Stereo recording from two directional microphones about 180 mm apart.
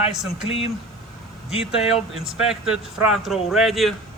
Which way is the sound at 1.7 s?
35° left (ahead or behind).